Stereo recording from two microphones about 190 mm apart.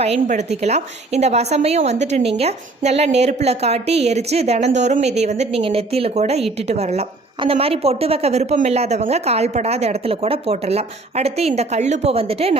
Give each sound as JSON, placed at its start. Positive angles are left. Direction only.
{"t": 0.0, "sound": "a woman's voice", "side_deg": -35}